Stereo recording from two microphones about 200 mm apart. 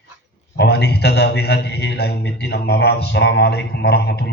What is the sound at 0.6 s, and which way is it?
A man's voice, 55° left (ahead or behind).